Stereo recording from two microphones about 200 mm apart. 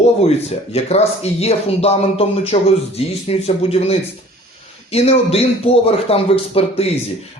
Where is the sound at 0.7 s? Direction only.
30° left (ahead or behind).